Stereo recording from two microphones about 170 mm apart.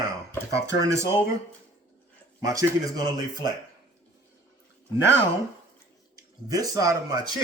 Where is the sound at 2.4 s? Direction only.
20° right (ahead or behind).